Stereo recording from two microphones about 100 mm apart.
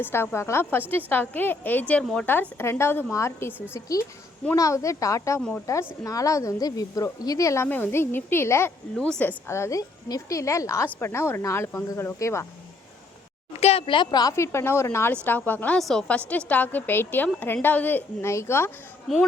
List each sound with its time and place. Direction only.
0.0 s a woman's voice: 20° left (ahead or behind)
9.0 s a woman's voice: 10° left (ahead or behind)
9.5 s a woman's voice: 30° left (ahead or behind)
13.6 s speech: 85° left; by 14.3 s 45° left (ahead or behind)
14.3 s a woman's voice: 30° left (ahead or behind)
15.8 s a woman's voice: centre (ahead or behind)
16.0 s a woman's voice: 15° left (ahead or behind)